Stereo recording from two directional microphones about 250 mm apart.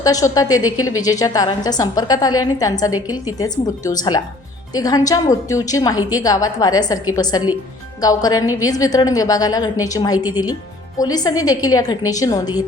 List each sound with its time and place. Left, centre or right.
0.0 s a woman's voice: centre
0.6 s speech: left
1.0 s a woman's voice: centre
10.2 s speech: centre
10.4 s a woman's voice: centre